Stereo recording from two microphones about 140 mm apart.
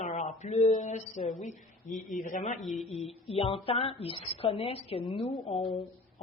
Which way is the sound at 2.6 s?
Centre (ahead or behind).